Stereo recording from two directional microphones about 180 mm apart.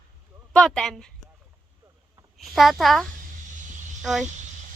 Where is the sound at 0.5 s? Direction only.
5° left (ahead or behind).